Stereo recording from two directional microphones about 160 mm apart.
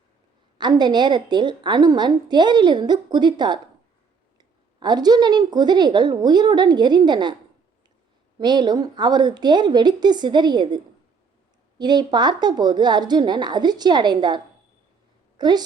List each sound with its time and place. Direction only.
0.6 s speech: 25° right (ahead or behind)
8.4 s speech: 25° right (ahead or behind)
11.8 s a woman's voice: 25° right (ahead or behind)